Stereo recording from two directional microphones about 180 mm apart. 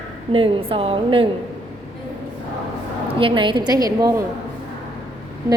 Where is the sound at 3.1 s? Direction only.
30° right (ahead or behind).